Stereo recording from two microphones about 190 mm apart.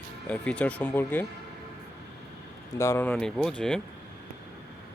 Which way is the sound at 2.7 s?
15° left (ahead or behind).